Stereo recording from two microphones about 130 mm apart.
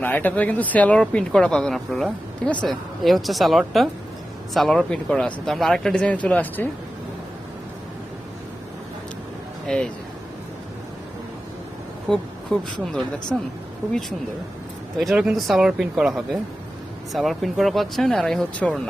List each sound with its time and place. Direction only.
0.0 s speech: 15° left (ahead or behind)
9.6 s speech: 5° left (ahead or behind)
12.0 s speech: 5° left (ahead or behind)
15.1 s speech: 5° right (ahead or behind)